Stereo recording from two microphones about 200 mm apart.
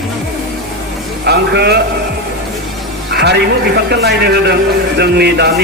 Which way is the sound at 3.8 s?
55° right (ahead or behind).